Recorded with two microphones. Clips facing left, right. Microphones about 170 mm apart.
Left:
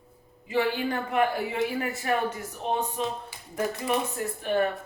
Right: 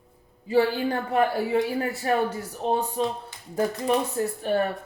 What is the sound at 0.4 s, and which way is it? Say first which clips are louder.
Speech: right 4 dB; 35° right (ahead or behind).